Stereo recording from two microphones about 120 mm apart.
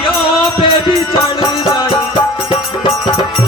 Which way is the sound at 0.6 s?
40° left (ahead or behind).